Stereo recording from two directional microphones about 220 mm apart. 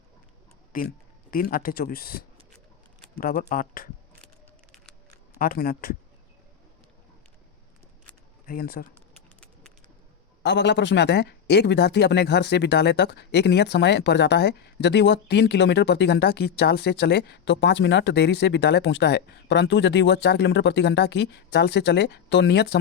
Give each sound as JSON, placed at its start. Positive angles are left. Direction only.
{"t": 0.7, "sound": "speech", "side_deg": 40}
{"t": 5.4, "sound": "speech", "side_deg": 40}
{"t": 8.4, "sound": "speech", "side_deg": 40}
{"t": 10.4, "sound": "speech", "side_deg": 50}